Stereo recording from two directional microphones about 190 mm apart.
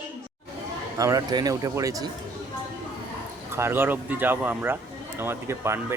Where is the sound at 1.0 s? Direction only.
20° right (ahead or behind).